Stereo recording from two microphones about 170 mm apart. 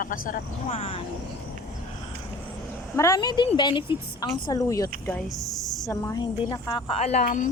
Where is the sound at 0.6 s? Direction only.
35° left (ahead or behind).